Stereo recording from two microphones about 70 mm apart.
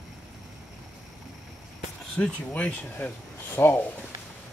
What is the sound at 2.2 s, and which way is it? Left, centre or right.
Speech, left.